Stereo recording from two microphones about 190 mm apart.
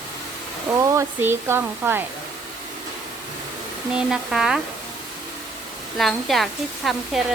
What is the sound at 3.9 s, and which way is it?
Speech, 5° right (ahead or behind).